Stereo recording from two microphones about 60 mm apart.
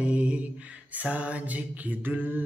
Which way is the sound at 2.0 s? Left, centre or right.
Right.